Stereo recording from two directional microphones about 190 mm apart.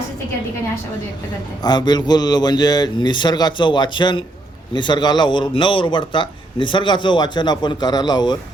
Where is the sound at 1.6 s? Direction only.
20° left (ahead or behind).